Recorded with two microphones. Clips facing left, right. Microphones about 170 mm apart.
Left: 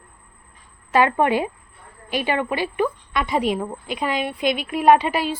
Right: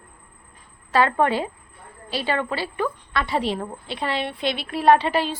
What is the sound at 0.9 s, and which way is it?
A woman's voice, 15° left (ahead or behind).